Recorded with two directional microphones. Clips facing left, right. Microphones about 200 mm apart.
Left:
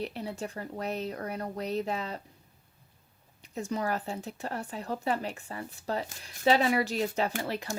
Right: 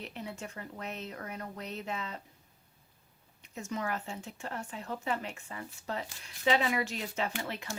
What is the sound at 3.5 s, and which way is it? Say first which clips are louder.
Speech: left 5 dB; 35° left (ahead or behind).